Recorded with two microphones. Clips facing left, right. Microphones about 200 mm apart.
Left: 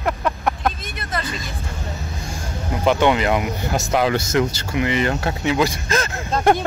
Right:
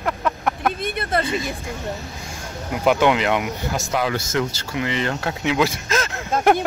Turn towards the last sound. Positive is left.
turn(degrees=-5)  # may be behind; listen again after turning